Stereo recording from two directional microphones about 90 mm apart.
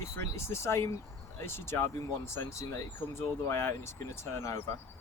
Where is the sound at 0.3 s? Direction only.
30° left (ahead or behind).